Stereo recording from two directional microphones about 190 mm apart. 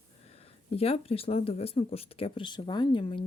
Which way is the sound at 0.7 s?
30° left (ahead or behind).